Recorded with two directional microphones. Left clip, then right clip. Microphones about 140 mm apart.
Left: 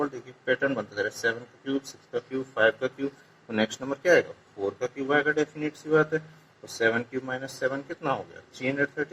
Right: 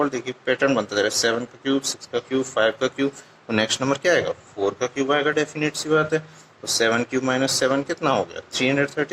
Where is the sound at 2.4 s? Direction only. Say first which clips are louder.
Right 2 dB; 60° right (ahead or behind).